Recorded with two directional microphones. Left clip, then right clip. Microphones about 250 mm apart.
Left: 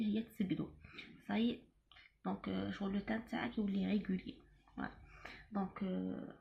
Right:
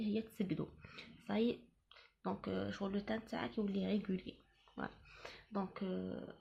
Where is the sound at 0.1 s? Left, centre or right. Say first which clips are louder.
Even; right.